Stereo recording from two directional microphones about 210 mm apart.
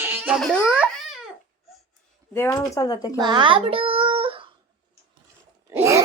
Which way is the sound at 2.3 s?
10° left (ahead or behind).